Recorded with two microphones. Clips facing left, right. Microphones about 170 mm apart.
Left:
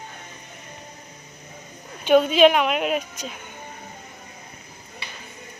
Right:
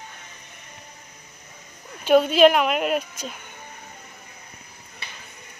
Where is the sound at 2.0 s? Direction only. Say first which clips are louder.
Even; 5° right (ahead or behind).